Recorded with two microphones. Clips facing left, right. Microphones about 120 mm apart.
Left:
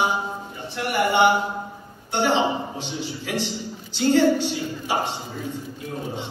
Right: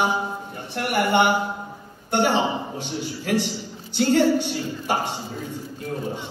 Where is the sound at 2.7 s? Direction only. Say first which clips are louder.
Right 1 dB; 55° right (ahead or behind).